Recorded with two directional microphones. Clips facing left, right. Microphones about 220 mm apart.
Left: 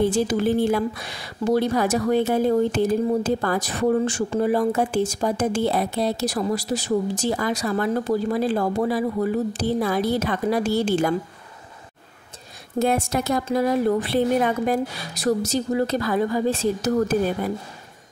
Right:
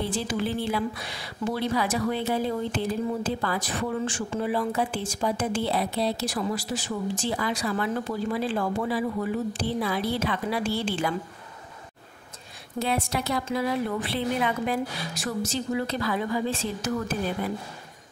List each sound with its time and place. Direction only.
0.0 s a woman's voice: 45° left (ahead or behind)
12.7 s a woman's voice: 45° left (ahead or behind)